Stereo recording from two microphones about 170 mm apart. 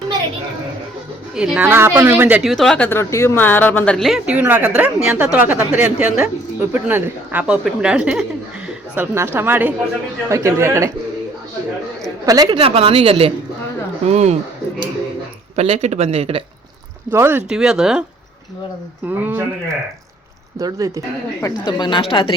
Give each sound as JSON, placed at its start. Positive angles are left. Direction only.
{"t": 1.4, "sound": "a woman's voice", "side_deg": -10}
{"t": 12.2, "sound": "speech", "side_deg": -20}
{"t": 12.5, "sound": "speech", "side_deg": -35}
{"t": 15.5, "sound": "speech", "side_deg": -40}
{"t": 17.1, "sound": "a woman's voice", "side_deg": -15}
{"t": 19.0, "sound": "a woman's voice", "side_deg": -10}
{"t": 20.6, "sound": "speech", "side_deg": -20}
{"t": 21.4, "sound": "a woman's voice", "side_deg": 25}